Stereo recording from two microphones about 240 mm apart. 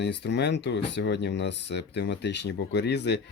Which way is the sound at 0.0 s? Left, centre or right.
Left.